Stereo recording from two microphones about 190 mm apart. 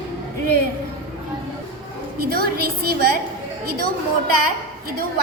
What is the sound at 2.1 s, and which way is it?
A woman's voice, 55° right (ahead or behind).